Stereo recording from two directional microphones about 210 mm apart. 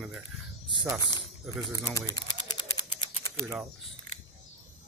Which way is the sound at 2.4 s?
20° left (ahead or behind).